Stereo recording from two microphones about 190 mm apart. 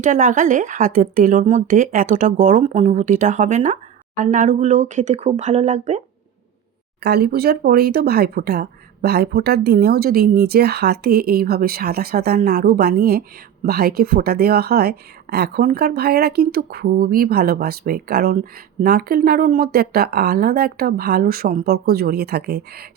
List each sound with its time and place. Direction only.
0.0 s speech: 45° right (ahead or behind)
7.0 s speech: 60° right (ahead or behind)